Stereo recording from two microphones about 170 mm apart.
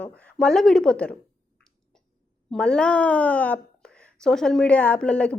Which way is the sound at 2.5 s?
5° left (ahead or behind).